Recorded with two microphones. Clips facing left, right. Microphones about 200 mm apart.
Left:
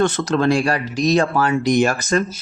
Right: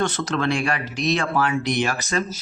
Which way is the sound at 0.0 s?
40° left (ahead or behind).